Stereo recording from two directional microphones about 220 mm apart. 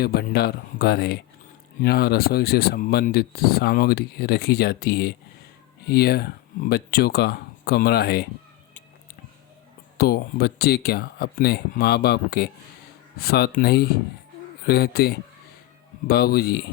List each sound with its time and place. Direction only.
0.0 s speech: 45° left (ahead or behind)
10.0 s speech: 45° left (ahead or behind)